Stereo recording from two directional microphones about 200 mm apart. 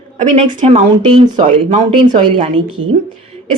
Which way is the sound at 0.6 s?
30° right (ahead or behind).